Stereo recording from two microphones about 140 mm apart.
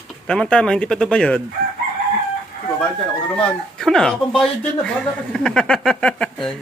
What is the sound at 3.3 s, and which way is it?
Speech, 5° left (ahead or behind).